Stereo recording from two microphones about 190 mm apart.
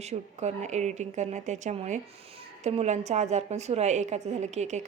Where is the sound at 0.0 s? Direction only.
35° right (ahead or behind).